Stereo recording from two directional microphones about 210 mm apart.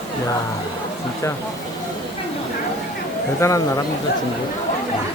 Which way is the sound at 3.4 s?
15° left (ahead or behind).